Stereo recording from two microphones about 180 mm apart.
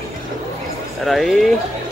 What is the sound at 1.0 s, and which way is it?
Speech, centre (ahead or behind).